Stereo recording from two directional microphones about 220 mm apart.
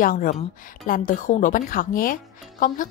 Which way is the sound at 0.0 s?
40° left (ahead or behind).